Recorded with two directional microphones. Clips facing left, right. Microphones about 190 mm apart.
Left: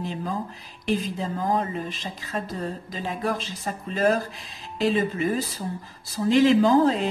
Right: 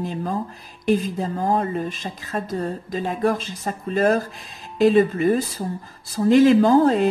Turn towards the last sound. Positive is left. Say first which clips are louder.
# right 3 dB
turn(degrees=-50)  # may be behind; listen again after turning